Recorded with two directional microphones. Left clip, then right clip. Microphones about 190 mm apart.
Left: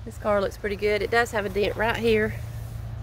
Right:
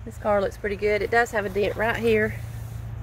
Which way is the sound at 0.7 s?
5° left (ahead or behind).